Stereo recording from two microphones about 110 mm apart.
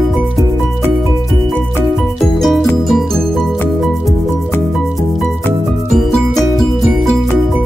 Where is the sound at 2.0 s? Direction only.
Centre (ahead or behind).